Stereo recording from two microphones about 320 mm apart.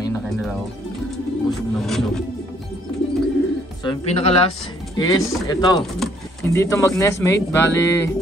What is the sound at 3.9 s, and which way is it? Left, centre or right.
Speech, centre.